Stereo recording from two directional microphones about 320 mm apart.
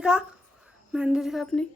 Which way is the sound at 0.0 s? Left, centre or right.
Centre.